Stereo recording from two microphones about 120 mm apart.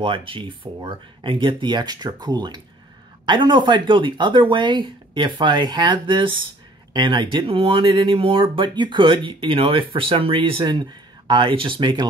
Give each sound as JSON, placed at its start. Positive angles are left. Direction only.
{"t": 0.0, "sound": "speech", "side_deg": -45}